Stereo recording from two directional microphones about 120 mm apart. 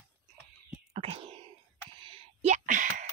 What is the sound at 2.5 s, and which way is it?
Speech, 90° right.